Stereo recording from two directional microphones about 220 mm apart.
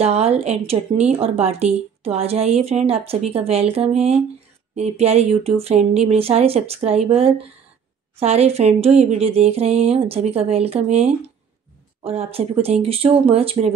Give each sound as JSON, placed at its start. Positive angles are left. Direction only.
{"t": 0.0, "sound": "a woman's voice", "side_deg": -30}